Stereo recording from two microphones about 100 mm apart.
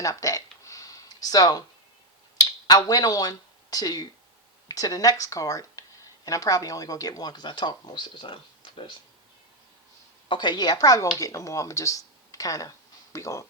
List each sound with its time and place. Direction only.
0.0 s a sound: 35° left (ahead or behind)
2.4 s speech: 35° left (ahead or behind); by 9.0 s 60° left (ahead or behind)
10.2 s speech: 50° left (ahead or behind); by 13.4 s 30° left (ahead or behind)